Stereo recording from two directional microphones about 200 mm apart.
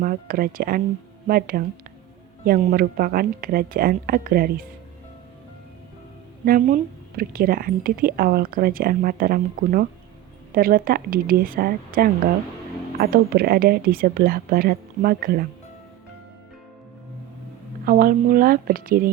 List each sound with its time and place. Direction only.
0.0 s speech: 45° right (ahead or behind)
6.4 s speech: 45° right (ahead or behind)
17.8 s speech: 45° right (ahead or behind)